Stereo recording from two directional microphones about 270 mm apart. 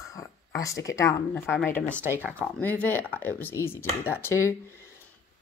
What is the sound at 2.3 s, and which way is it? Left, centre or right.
Speech, centre.